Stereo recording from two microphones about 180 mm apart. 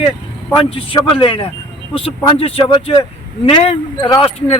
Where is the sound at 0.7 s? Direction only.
30° left (ahead or behind).